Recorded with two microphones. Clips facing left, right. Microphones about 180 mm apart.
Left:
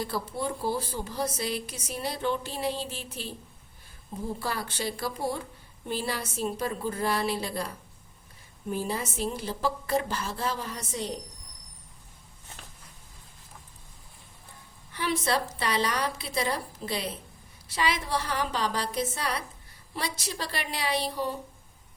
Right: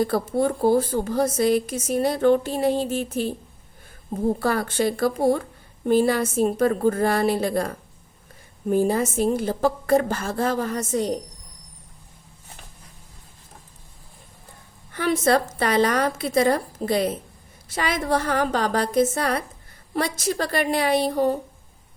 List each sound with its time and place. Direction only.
0.0 s a woman's voice: 50° right (ahead or behind)
14.9 s a woman's voice: 50° right (ahead or behind)